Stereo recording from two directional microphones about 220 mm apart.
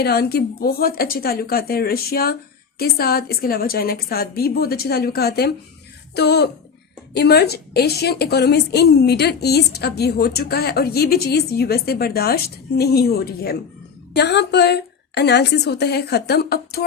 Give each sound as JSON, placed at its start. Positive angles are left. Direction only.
{"t": 0.0, "sound": "a woman's voice", "side_deg": 45}